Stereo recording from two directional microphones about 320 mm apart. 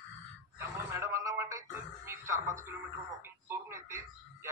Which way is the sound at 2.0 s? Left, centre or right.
Centre.